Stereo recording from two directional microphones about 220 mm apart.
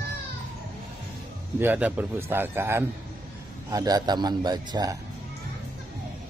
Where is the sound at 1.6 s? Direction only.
10° right (ahead or behind).